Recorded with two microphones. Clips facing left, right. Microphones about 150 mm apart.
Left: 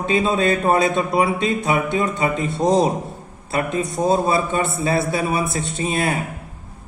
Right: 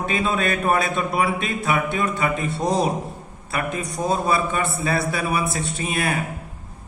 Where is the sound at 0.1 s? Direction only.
25° left (ahead or behind).